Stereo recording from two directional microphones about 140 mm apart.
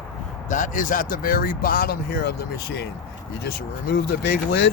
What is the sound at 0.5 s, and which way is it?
Speech, 65° left (ahead or behind).